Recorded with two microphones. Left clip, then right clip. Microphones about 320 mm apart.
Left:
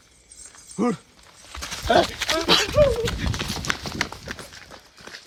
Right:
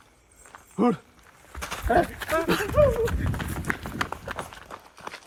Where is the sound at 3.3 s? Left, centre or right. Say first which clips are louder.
Left 4 dB; centre.